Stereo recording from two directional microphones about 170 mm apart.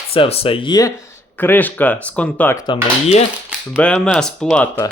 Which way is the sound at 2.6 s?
35° left (ahead or behind).